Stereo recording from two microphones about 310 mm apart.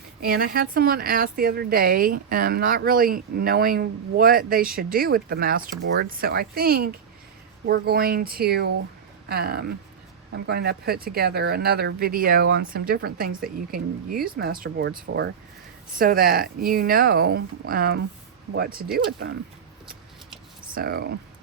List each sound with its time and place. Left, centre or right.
0.2 s speech: right
20.7 s speech: right